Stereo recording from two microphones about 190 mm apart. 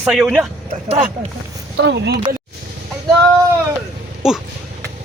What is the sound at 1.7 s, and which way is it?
Speech, 65° right (ahead or behind).